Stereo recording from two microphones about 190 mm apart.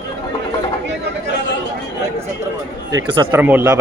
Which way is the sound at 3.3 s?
10° right (ahead or behind).